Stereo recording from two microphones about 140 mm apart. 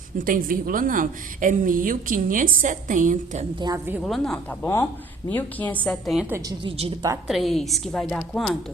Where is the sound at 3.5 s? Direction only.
30° right (ahead or behind).